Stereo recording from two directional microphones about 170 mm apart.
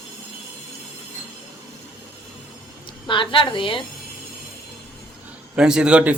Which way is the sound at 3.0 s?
30° left (ahead or behind).